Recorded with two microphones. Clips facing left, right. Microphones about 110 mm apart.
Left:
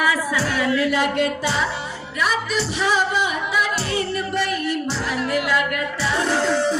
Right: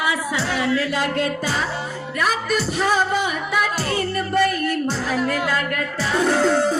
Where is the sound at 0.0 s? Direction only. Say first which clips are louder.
Left 2 dB; 25° right (ahead or behind); by 1.6 s 40° right (ahead or behind).